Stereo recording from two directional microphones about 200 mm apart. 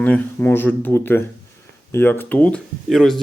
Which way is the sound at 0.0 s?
10° left (ahead or behind).